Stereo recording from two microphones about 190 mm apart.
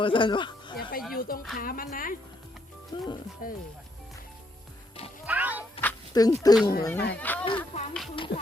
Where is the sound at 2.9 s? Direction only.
20° left (ahead or behind).